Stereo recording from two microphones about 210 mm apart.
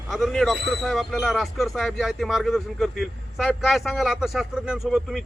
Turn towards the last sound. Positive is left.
turn(degrees=0)  # may be behind; listen again after turning